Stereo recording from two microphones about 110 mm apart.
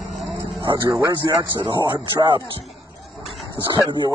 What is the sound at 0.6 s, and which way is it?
Speech, 35° right (ahead or behind).